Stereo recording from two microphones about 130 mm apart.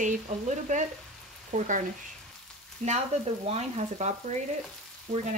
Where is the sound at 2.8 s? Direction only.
65° right (ahead or behind).